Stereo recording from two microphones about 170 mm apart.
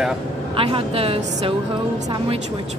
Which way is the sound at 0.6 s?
30° right (ahead or behind).